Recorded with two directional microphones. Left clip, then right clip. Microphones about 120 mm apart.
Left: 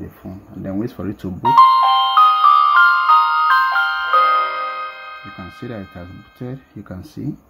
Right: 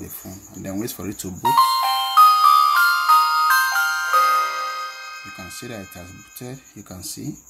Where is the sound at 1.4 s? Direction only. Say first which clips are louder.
Left 6 dB; 5° left (ahead or behind).